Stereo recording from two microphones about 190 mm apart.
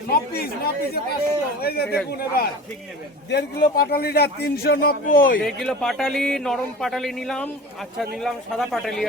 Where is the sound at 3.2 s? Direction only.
60° left (ahead or behind).